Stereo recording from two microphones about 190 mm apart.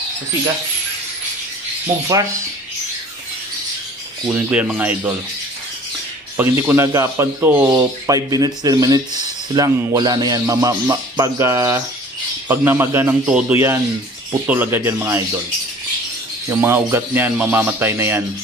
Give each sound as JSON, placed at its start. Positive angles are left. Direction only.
{"t": 4.3, "sound": "speech", "side_deg": -5}
{"t": 6.3, "sound": "speech", "side_deg": -10}
{"t": 16.4, "sound": "speech", "side_deg": -10}